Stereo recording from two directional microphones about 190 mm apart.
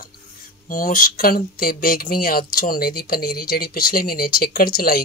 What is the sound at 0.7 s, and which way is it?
Speech, 45° left (ahead or behind).